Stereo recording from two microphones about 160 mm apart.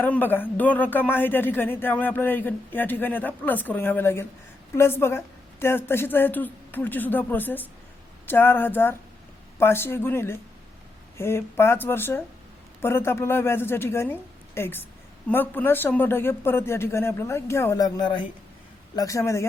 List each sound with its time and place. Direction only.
0.0 s speech: 10° left (ahead or behind)